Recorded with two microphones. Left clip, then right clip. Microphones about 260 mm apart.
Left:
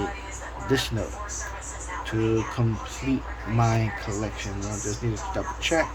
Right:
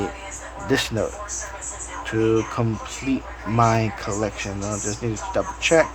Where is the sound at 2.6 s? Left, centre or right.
Centre.